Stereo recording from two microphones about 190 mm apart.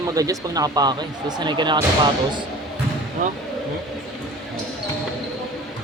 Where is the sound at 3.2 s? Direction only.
40° right (ahead or behind).